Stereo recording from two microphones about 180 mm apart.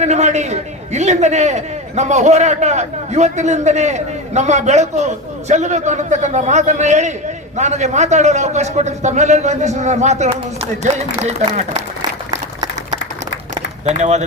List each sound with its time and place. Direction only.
0.0 s a man's voice: 40° right (ahead or behind)
14.0 s a man's voice: 40° right (ahead or behind)